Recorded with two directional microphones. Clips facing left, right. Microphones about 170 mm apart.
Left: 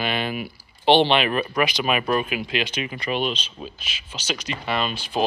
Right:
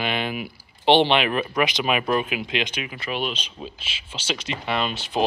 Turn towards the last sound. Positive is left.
turn(degrees=-25)  # may be behind; listen again after turning